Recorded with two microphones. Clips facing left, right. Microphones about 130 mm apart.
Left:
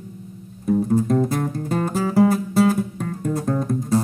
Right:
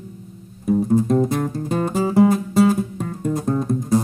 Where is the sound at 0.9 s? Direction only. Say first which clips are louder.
Right 3 dB; 20° right (ahead or behind).